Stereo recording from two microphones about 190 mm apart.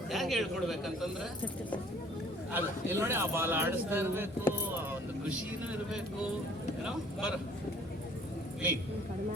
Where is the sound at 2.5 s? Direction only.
10° right (ahead or behind).